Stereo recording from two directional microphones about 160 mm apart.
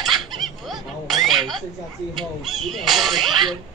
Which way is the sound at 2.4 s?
Centre (ahead or behind).